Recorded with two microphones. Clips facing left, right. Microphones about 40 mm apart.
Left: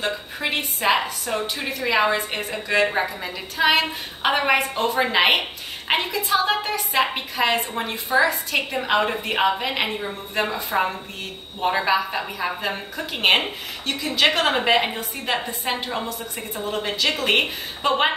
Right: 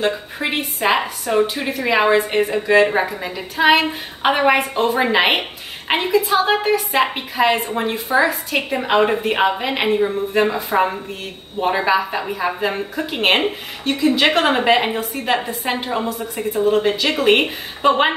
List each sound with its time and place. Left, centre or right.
0.0 s a woman's voice: centre